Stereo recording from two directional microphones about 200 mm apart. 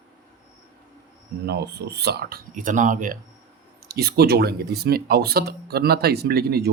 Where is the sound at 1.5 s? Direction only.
55° right (ahead or behind).